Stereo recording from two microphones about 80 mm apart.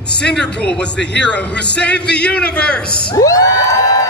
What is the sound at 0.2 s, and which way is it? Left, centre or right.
Speech, centre.